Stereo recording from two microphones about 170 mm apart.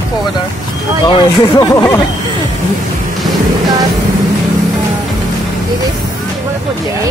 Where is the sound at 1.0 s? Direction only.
25° left (ahead or behind).